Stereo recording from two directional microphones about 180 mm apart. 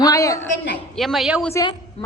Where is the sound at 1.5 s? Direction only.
25° left (ahead or behind).